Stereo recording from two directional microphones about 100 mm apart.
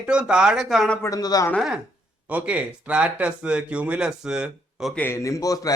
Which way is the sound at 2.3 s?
15° right (ahead or behind).